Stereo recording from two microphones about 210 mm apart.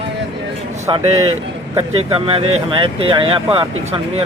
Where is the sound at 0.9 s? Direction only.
25° right (ahead or behind).